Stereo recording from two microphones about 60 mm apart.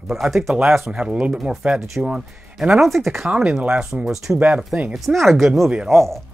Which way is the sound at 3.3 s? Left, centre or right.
Centre.